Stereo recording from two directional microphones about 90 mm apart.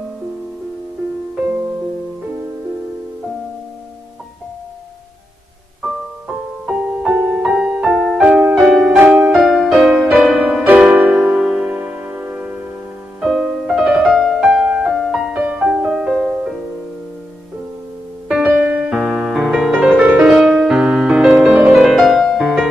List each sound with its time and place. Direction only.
5.8 s music: 10° right (ahead or behind)
8.9 s music: 25° right (ahead or behind)
9.3 s music: 5° right (ahead or behind)
13.3 s music: centre (ahead or behind)
18.4 s music: 15° right (ahead or behind)